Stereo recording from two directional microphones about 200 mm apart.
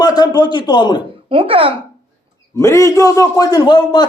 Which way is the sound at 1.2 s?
25° right (ahead or behind).